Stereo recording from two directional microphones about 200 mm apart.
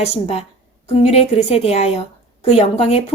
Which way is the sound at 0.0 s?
30° left (ahead or behind).